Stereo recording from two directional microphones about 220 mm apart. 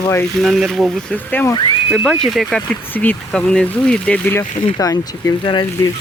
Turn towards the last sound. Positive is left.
turn(degrees=20)  # may be behind; listen again after turning